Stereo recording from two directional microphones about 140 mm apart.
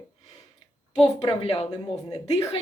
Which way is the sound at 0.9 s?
45° left (ahead or behind).